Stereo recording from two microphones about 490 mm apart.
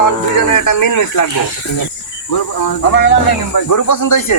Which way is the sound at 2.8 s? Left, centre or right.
Left.